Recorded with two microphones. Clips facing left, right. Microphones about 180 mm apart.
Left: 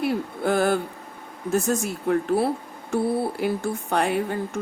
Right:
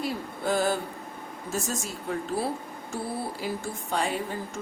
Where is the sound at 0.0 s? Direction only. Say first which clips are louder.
Left 6 dB; 60° left (ahead or behind).